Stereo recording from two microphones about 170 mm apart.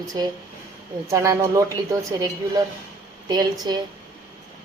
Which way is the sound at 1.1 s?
20° right (ahead or behind).